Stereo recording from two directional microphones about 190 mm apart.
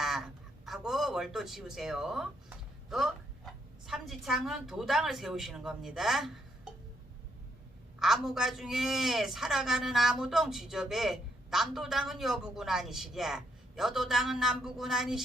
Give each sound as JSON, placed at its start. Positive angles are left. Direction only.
{"t": 0.0, "sound": "a sound", "side_deg": 0}
{"t": 2.9, "sound": "a woman's voice", "side_deg": 0}
{"t": 7.9, "sound": "a man's voice", "side_deg": 0}